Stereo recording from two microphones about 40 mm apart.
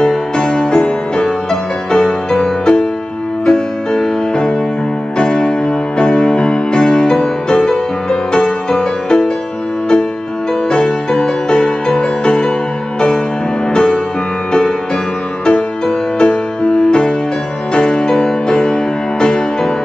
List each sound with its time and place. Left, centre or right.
0.0 s music: centre
10.7 s music: left
16.2 s music: left